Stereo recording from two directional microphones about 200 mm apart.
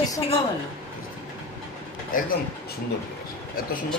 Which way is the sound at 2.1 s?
45° left (ahead or behind).